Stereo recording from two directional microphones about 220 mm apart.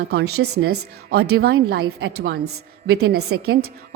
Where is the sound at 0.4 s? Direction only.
55° right (ahead or behind).